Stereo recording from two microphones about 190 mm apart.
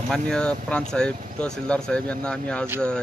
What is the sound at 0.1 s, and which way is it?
Speech, 5° left (ahead or behind).